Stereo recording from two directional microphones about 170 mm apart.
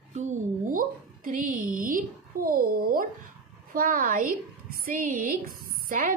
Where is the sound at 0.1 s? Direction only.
50° right (ahead or behind).